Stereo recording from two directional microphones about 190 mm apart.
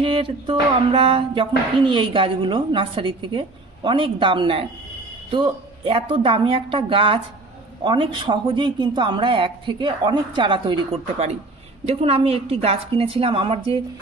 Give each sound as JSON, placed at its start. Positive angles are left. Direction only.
{"t": 0.0, "sound": "speech", "side_deg": -25}